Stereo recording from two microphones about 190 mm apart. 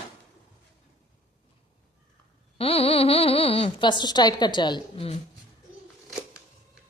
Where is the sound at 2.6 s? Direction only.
30° left (ahead or behind).